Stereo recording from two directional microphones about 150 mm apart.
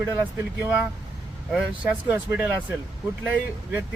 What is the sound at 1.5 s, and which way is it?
Speech, 10° right (ahead or behind).